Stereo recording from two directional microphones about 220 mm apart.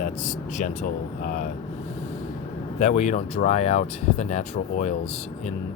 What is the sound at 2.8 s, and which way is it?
Speech, 30° left (ahead or behind).